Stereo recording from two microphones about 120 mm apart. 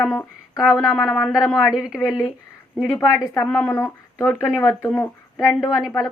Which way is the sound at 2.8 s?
30° left (ahead or behind).